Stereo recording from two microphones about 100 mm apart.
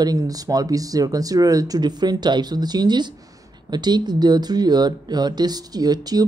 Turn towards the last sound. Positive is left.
turn(degrees=-40)  # may be behind; listen again after turning